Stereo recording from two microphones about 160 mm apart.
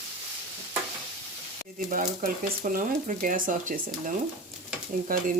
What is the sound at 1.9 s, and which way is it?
Speech, 50° right (ahead or behind).